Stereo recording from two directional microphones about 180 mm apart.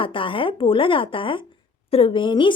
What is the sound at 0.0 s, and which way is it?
Speech, 30° left (ahead or behind).